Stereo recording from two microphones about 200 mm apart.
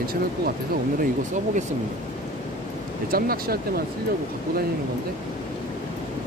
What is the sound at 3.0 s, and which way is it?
Speech, 45° right (ahead or behind).